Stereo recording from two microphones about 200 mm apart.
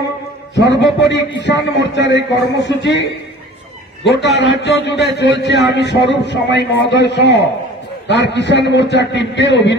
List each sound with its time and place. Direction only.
0.6 s a man's voice: 60° left (ahead or behind)